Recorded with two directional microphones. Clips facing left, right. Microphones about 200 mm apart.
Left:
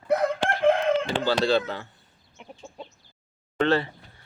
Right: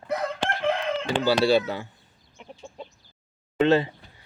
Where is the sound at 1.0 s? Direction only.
10° right (ahead or behind).